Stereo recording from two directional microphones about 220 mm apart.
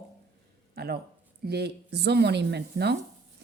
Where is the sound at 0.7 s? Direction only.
45° right (ahead or behind).